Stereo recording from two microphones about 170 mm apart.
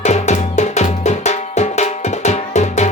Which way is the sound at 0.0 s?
45° left (ahead or behind).